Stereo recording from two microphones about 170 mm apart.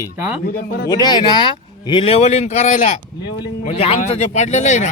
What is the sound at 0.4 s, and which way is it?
Speech, 65° left (ahead or behind).